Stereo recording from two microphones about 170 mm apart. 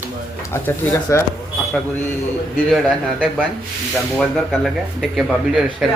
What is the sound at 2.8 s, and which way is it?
Speech, 5° right (ahead or behind).